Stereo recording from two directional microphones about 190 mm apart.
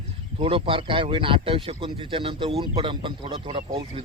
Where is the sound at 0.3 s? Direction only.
30° right (ahead or behind).